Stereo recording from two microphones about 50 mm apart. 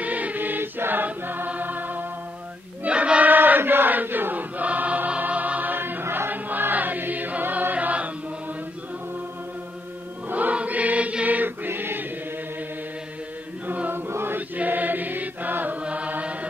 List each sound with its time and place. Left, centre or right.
0.0 s chant: right
1.5 s music: right
2.8 s choir: right
3.3 s chant: right
10.3 s choir: right
13.9 s chant: right
14.6 s music: right
15.8 s chant: right